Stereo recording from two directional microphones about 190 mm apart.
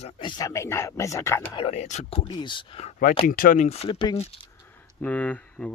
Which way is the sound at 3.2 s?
50° left (ahead or behind).